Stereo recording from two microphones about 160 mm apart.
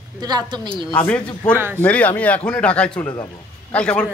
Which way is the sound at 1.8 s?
10° left (ahead or behind).